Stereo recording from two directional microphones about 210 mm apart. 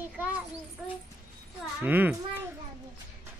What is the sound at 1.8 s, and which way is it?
Speech, 10° right (ahead or behind).